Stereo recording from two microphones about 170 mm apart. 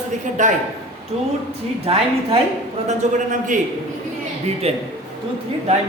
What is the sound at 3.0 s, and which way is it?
Speech, 45° right (ahead or behind).